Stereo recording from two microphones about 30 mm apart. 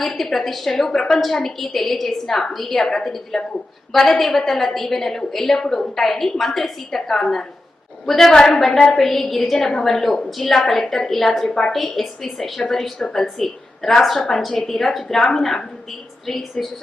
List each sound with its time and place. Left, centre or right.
0.0 s a woman's voice: centre
8.3 s a woman's voice: left
8.5 s a woman's voice: centre
11.7 s a woman's voice: centre